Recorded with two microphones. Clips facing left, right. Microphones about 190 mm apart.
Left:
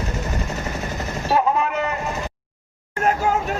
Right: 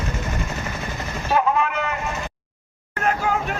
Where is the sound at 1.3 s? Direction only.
35° left (ahead or behind).